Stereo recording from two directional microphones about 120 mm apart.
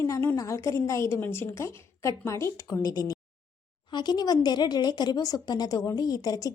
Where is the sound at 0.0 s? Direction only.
20° left (ahead or behind).